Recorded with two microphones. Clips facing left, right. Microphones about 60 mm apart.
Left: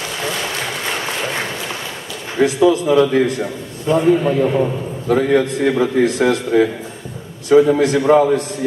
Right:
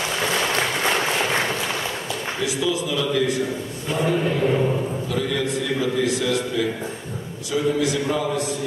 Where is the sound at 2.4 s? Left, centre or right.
Left.